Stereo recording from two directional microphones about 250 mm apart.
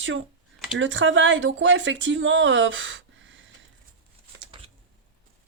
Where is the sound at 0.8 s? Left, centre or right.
Right.